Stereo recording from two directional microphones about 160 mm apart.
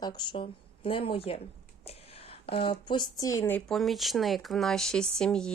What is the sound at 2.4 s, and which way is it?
Speech, 35° left (ahead or behind).